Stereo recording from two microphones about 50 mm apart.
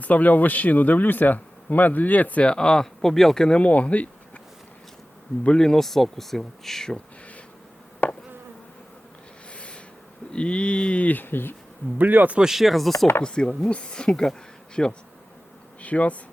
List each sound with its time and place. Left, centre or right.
0.0 s speech: left; by 3.6 s centre
3.6 s speech: left
5.5 s speech: centre
8.0 s insect: left
9.5 s rub: left
10.3 s speech: left
11.9 s speech: right
12.4 s speech: centre
13.2 s speech: centre
15.8 s speech: left